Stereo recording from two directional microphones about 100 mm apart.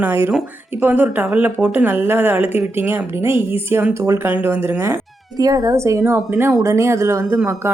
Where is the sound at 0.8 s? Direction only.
15° right (ahead or behind).